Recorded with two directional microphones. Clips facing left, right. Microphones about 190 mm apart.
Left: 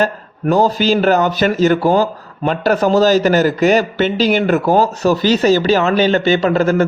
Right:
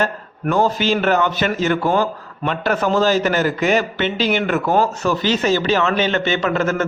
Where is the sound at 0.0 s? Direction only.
35° left (ahead or behind).